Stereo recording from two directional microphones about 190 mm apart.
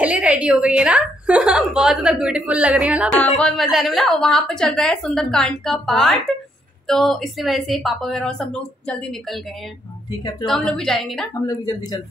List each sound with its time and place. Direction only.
0.0 s a woman's voice: 5° right (ahead or behind)
3.3 s a woman's voice: 5° left (ahead or behind)
10.4 s a woman's voice: 5° left (ahead or behind)
11.4 s speech: 20° left (ahead or behind)